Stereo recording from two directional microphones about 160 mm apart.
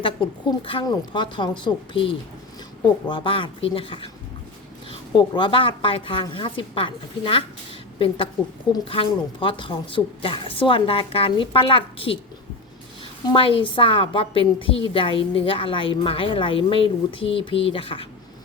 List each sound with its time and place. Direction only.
0.0 s a woman's voice: 35° left (ahead or behind)
13.3 s a woman's voice: 35° left (ahead or behind)